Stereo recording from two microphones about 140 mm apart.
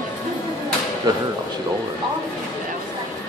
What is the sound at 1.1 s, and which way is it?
Speech, 25° right (ahead or behind).